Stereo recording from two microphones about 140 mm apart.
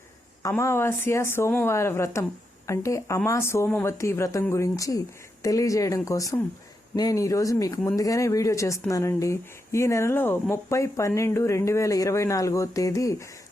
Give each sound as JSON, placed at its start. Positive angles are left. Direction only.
{"t": 0.5, "sound": "speech", "side_deg": 15}